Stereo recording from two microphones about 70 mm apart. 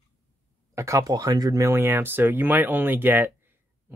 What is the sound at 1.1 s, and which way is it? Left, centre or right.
Speech, right.